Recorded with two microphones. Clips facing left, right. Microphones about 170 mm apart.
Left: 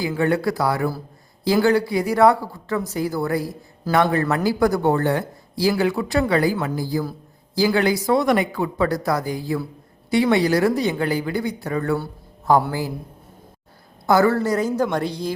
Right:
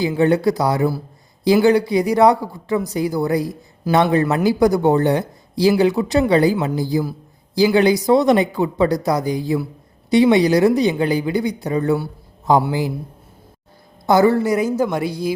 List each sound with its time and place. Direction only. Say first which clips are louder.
0.0 s speech: right 5 dB; 20° right (ahead or behind)
14.1 s speech: right 3 dB; 15° right (ahead or behind)